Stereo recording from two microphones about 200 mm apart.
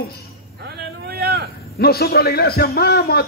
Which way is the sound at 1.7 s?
50° left (ahead or behind).